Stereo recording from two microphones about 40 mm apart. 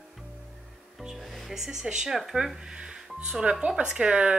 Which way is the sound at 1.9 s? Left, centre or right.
Centre.